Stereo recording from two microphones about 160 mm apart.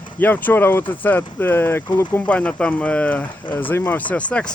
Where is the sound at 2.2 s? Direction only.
10° left (ahead or behind).